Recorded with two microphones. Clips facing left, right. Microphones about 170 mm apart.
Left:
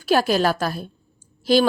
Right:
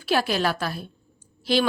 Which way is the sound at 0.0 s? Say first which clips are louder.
Left 5 dB; 40° left (ahead or behind).